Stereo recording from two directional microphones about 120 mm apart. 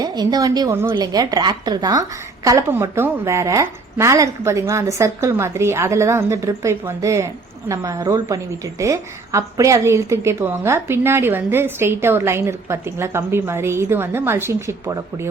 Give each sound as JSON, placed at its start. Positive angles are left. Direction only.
{"t": 0.0, "sound": "a woman's voice", "side_deg": -35}
{"t": 0.7, "sound": "a woman's voice", "side_deg": -20}
{"t": 0.9, "sound": "a woman's voice", "side_deg": -35}